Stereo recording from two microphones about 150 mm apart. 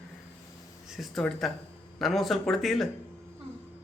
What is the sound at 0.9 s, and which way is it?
A man's voice, centre (ahead or behind).